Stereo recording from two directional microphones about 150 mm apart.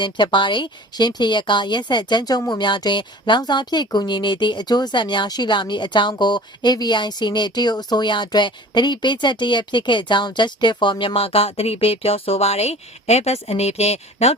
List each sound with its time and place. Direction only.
0.0 s speech: 30° left (ahead or behind)